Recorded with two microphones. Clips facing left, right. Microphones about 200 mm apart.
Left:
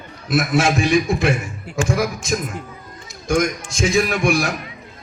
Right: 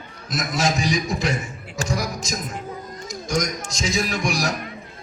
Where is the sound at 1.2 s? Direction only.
60° left (ahead or behind).